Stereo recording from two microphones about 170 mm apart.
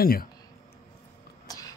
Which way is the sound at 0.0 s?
60° left (ahead or behind).